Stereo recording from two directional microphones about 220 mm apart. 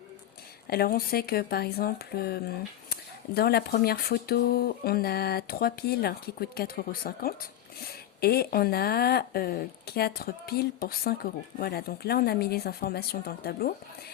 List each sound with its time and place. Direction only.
0.7 s speech: 45° left (ahead or behind)